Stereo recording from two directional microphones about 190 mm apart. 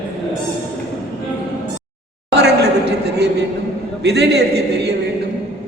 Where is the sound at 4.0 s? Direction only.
60° right (ahead or behind).